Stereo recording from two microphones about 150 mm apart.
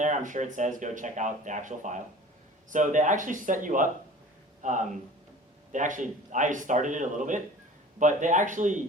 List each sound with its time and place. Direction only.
0.0 s speech: 55° right (ahead or behind)